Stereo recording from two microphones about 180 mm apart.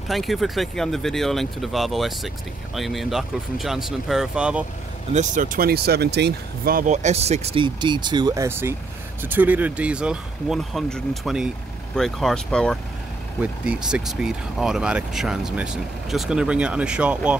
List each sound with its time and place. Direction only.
0.1 s speech: centre (ahead or behind)
5.1 s speech: 45° right (ahead or behind); by 17.4 s 5° right (ahead or behind)